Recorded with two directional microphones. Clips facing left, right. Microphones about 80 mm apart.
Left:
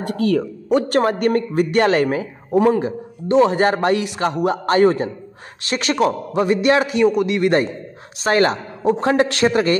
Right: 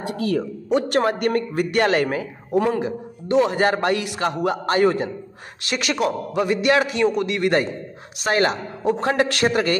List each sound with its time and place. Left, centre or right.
0.0 s a man's voice: left
8.2 s a man's voice: left